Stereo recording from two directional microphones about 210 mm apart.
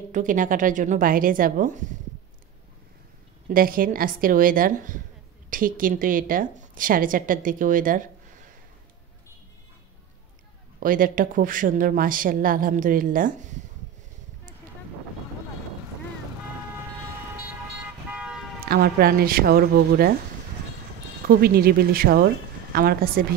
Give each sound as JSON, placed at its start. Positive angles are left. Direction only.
{"t": 0.1, "sound": "a woman's voice", "side_deg": -40}
{"t": 3.4, "sound": "a woman's voice", "side_deg": -40}
{"t": 10.8, "sound": "a woman's voice", "side_deg": -40}
{"t": 18.1, "sound": "car alarm", "side_deg": -5}
{"t": 18.7, "sound": "speech", "side_deg": -45}
{"t": 21.3, "sound": "speech", "side_deg": -45}